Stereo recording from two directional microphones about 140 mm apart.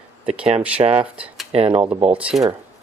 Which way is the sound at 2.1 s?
10° right (ahead or behind).